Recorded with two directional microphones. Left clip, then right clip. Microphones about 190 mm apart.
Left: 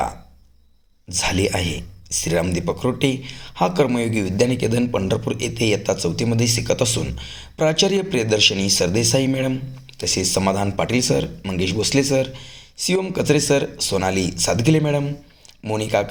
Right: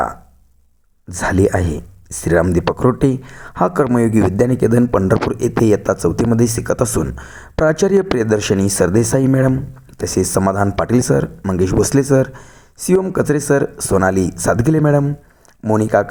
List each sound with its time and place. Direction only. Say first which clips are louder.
1.1 s speech: right 5 dB; 45° right (ahead or behind)